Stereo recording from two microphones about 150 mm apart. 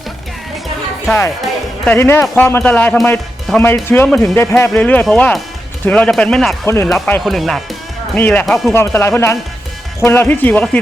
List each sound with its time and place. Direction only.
1.4 s music: 5° left (ahead or behind)
2.0 s speech: 15° left (ahead or behind)
6.7 s speech: 15° left (ahead or behind)
6.9 s speech: 5° left (ahead or behind)
8.1 s speech: 10° left (ahead or behind)
8.7 s speech: 15° left (ahead or behind)